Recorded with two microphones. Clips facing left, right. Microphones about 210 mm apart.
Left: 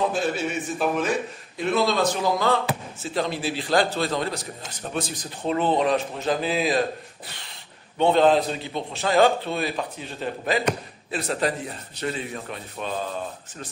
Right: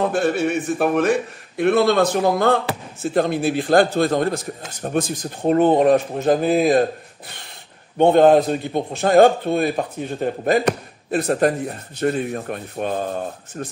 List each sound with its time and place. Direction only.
0.0 s speech: 60° right (ahead or behind)
8.0 s speech: 50° right (ahead or behind)